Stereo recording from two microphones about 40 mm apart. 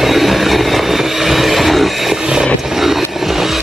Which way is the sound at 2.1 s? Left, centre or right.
Centre.